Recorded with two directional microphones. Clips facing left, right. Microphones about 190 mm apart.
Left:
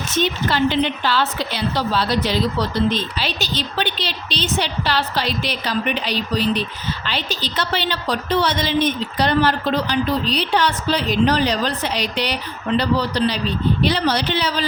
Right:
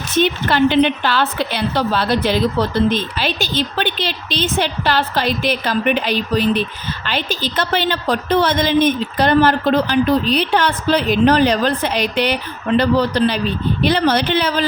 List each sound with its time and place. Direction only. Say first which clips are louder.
0.2 s a woman's voice: right 4 dB; 55° right (ahead or behind)